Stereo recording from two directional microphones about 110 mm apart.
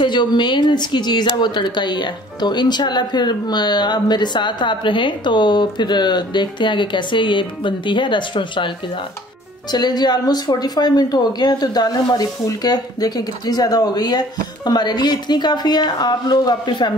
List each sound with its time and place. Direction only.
0.0 s speech: 45° left (ahead or behind)